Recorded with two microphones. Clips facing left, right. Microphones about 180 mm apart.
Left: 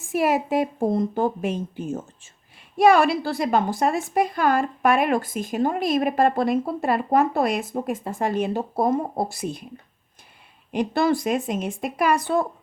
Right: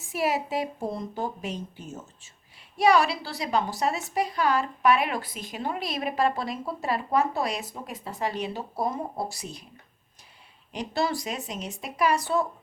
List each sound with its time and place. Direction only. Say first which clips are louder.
0.0 s a woman's voice: left 6 dB; 50° left (ahead or behind)
10.7 s a woman's voice: left 7 dB; 55° left (ahead or behind)